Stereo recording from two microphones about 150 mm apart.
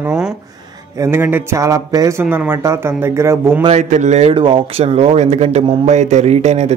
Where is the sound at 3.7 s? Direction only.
55° right (ahead or behind).